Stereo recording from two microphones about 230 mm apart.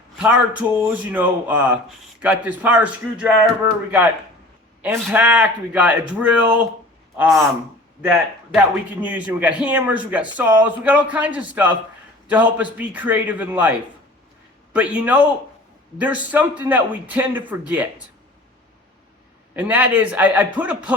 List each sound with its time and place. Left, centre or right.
0.2 s a man's voice: centre
4.8 s a man's voice: centre
8.5 s a man's voice: centre
19.5 s a man's voice: centre